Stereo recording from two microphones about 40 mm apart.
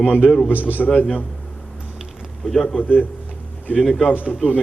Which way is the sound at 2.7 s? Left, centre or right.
Left.